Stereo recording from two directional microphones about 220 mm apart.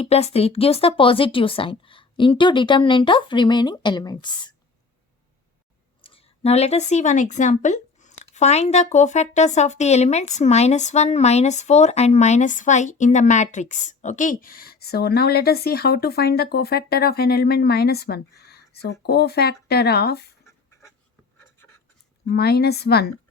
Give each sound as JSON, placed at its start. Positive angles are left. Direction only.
{"t": 0.0, "sound": "a woman's voice", "side_deg": 30}
{"t": 6.0, "sound": "speech", "side_deg": 25}
{"t": 21.3, "sound": "writing", "side_deg": 10}
{"t": 22.3, "sound": "a woman's voice", "side_deg": 45}